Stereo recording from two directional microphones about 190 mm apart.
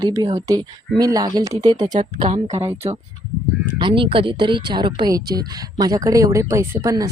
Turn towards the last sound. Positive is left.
turn(degrees=-20)  # may be behind; listen again after turning